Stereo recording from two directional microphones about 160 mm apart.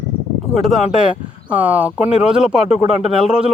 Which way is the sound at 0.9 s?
5° right (ahead or behind).